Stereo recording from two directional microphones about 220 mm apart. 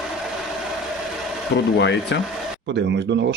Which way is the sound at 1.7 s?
50° left (ahead or behind).